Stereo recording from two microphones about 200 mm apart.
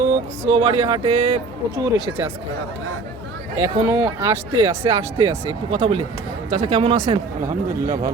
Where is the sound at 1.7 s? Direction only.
15° right (ahead or behind).